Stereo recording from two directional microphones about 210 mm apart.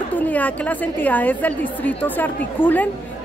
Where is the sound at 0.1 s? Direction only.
5° left (ahead or behind).